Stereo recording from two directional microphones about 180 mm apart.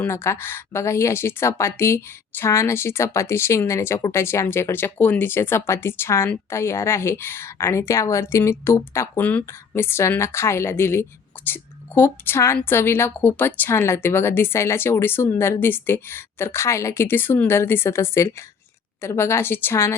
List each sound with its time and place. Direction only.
0.0 s a woman's voice: 15° left (ahead or behind)